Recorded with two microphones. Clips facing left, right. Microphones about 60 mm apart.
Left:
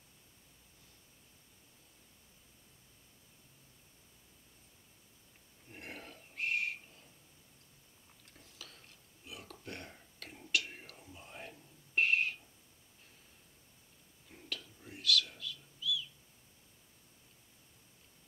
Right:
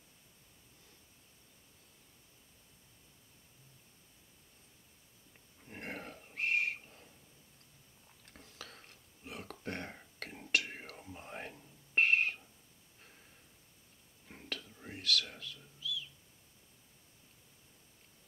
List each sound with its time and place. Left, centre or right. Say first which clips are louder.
5.7 s a sound: right 4 dB; right
8.3 s whispering: right 4 dB; right
14.5 s whispering: right 2 dB; right